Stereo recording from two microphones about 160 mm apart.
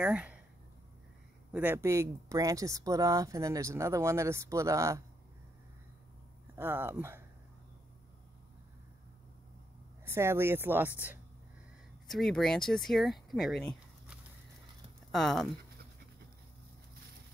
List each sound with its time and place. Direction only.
0.0 s a woman's voice: 5° right (ahead or behind)
1.5 s speech: 10° right (ahead or behind)
6.5 s speech: 15° right (ahead or behind)
10.0 s a woman's voice: 15° right (ahead or behind)
12.1 s speech: centre (ahead or behind)
15.0 s speech: centre (ahead or behind)